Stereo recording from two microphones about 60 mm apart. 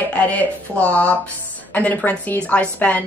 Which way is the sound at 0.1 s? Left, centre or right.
Left.